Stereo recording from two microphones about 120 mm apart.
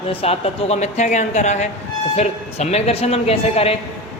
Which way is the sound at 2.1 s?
60° left (ahead or behind).